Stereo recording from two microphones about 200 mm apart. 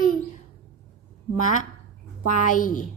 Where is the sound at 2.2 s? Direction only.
40° left (ahead or behind).